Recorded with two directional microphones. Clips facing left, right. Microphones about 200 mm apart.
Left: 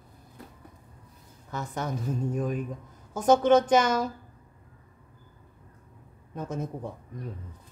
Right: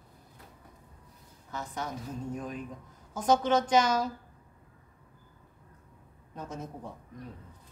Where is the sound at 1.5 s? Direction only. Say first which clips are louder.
Left 4 dB; 50° left (ahead or behind).